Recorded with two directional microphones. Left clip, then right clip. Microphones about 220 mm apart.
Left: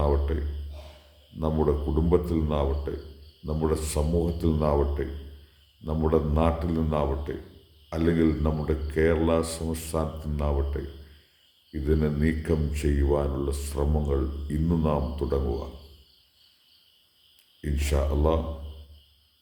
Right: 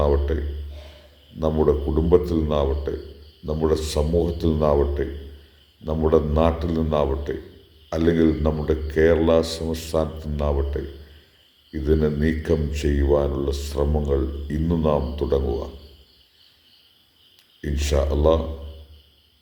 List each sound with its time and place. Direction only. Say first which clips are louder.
0.0 s a sound: right 6 dB; 20° left (ahead or behind)
1.4 s a man's voice: right 6 dB; 15° left (ahead or behind)
17.6 s a man's voice: right 6 dB; 20° left (ahead or behind)